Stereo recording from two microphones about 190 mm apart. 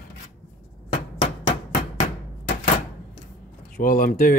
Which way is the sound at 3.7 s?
45° left (ahead or behind).